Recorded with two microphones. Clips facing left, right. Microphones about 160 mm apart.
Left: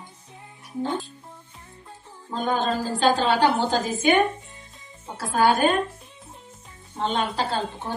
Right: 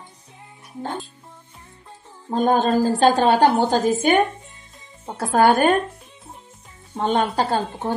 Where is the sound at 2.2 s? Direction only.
50° right (ahead or behind).